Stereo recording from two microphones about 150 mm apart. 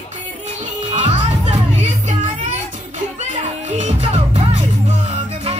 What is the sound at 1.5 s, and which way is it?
Music, 50° right (ahead or behind).